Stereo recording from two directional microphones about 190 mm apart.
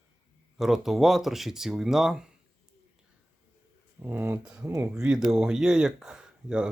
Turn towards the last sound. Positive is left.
turn(degrees=-5)  # may be behind; listen again after turning